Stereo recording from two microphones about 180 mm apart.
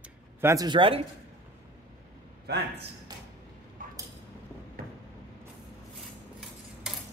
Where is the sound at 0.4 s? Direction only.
15° right (ahead or behind).